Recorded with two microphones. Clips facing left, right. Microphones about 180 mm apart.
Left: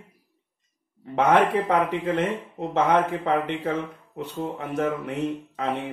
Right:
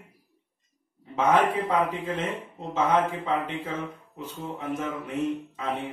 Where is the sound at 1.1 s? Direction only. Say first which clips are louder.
Left 3 dB; 70° left (ahead or behind).